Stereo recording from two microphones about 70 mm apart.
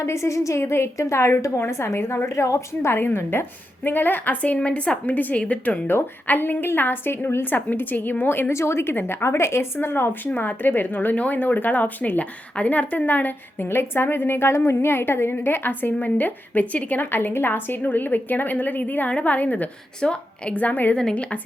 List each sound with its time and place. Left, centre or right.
0.0 s a woman's voice: left
20.9 s speech: centre